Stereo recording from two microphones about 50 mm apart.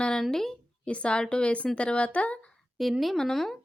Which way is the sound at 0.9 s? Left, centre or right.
Left.